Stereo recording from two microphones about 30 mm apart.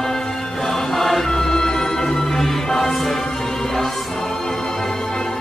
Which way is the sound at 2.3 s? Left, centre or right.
Centre.